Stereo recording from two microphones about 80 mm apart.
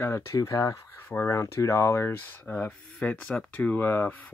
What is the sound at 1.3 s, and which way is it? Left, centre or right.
Speech, left.